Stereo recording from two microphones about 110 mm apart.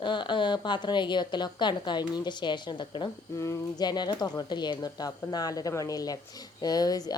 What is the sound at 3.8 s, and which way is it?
A woman's voice, 40° left (ahead or behind).